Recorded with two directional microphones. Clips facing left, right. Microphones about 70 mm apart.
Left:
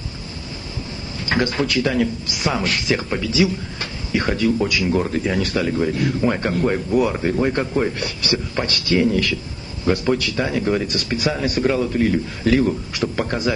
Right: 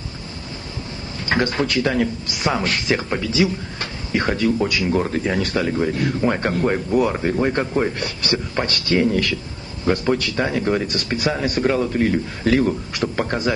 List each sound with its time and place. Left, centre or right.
1.2 s speech: right